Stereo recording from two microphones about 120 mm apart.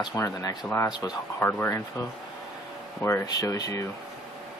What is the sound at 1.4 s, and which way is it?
Speech, 15° left (ahead or behind).